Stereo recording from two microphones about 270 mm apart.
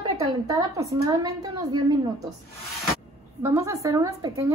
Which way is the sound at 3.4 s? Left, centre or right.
Centre.